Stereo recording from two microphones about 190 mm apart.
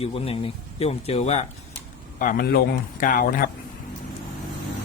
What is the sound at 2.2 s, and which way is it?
Speech, 50° left (ahead or behind).